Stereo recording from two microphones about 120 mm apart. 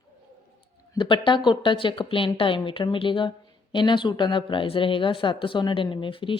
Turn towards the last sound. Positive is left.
turn(degrees=45)  # may be behind; listen again after turning